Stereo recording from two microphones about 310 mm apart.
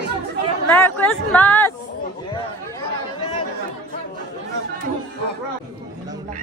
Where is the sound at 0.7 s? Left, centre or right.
Centre.